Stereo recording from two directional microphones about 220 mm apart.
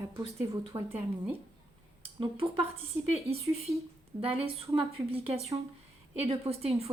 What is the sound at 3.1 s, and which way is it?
A woman's voice, 30° right (ahead or behind).